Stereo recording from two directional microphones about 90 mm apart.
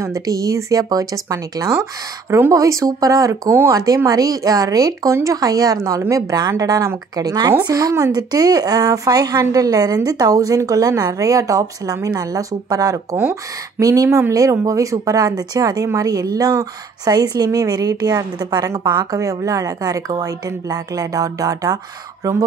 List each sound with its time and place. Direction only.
0.0 s speech: 40° right (ahead or behind)
13.1 s speech: 20° right (ahead or behind)
13.7 s speech: 40° right (ahead or behind)